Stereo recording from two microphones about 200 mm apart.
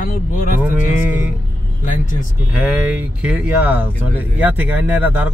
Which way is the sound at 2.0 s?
40° left (ahead or behind).